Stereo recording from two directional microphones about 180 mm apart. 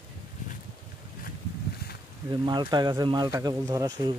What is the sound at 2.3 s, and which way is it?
Speech, 25° right (ahead or behind).